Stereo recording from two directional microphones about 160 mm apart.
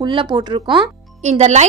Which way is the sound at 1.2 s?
45° right (ahead or behind).